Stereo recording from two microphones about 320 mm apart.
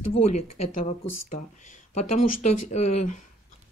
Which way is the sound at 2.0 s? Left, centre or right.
Left.